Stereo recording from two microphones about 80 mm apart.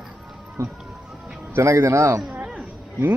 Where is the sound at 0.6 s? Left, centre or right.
Right.